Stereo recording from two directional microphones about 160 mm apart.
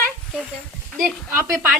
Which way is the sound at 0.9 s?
5° left (ahead or behind).